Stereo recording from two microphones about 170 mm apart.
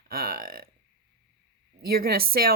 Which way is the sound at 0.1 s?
60° right (ahead or behind).